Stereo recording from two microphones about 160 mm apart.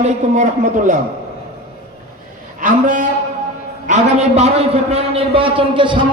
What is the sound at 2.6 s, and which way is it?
Speech, 55° right (ahead or behind).